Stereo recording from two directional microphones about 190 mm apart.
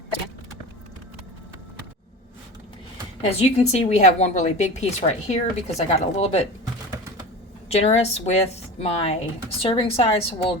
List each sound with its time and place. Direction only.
3.2 s a woman's voice: 35° left (ahead or behind)
7.7 s a woman's voice: 35° left (ahead or behind)